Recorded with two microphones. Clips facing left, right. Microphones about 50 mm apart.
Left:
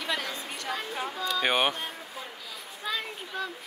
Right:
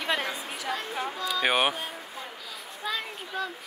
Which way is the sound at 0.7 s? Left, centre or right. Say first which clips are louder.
Right 2 dB; centre.